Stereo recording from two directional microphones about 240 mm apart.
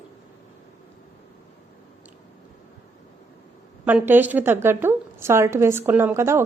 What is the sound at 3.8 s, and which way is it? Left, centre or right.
A woman's voice, centre.